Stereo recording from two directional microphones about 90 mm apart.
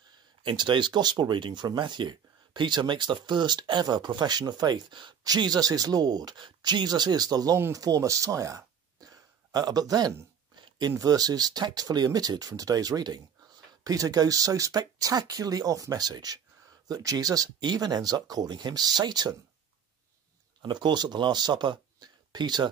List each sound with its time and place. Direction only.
0.4 s speech: 60° right (ahead or behind); by 10.1 s 45° right (ahead or behind)
10.5 s a sound: 60° right (ahead or behind)
10.9 s speech: 40° right (ahead or behind)
20.6 s speech: 55° right (ahead or behind)